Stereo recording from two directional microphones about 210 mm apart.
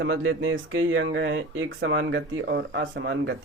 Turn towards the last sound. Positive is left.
turn(degrees=-55)  # may be behind; listen again after turning